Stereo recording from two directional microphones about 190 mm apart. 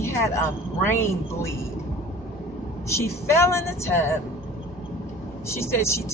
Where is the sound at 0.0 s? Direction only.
15° left (ahead or behind).